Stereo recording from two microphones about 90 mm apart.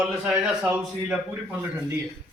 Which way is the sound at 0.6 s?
20° right (ahead or behind).